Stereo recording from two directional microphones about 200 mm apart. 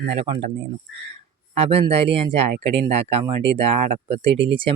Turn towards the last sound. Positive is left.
turn(degrees=-25)  # may be behind; listen again after turning